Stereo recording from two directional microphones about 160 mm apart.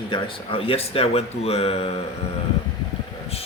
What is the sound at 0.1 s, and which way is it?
A man's voice, 35° left (ahead or behind).